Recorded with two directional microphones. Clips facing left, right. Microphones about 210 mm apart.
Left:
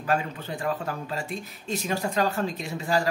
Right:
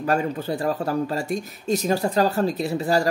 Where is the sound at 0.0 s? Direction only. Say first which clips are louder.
Right 5 dB; 40° right (ahead or behind).